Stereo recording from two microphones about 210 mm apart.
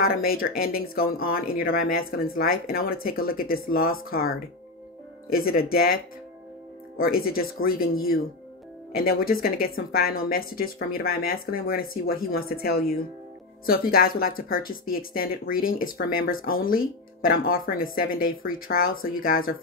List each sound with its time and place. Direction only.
0.0 s speech: 45° left (ahead or behind)
5.3 s speech: 45° left (ahead or behind)
7.0 s speech: 45° left (ahead or behind)
8.9 s speech: 45° left (ahead or behind)